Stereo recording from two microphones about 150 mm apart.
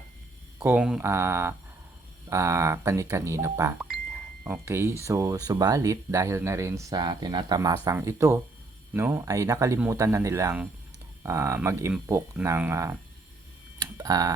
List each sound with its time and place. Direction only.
0.6 s speech: 10° right (ahead or behind)
3.8 s music: 5° right (ahead or behind)
4.6 s speech: 15° right (ahead or behind)
13.7 s a sound: 25° right (ahead or behind)